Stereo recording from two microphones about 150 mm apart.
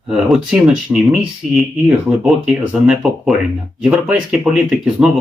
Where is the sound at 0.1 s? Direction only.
5° right (ahead or behind).